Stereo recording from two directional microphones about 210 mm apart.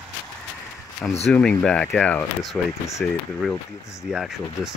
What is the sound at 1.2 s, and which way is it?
Speech, 5° left (ahead or behind).